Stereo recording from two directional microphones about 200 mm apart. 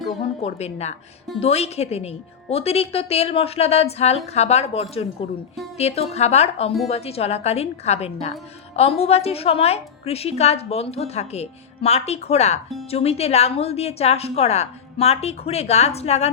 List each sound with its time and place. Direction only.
0.4 s a woman's voice: 35° left (ahead or behind)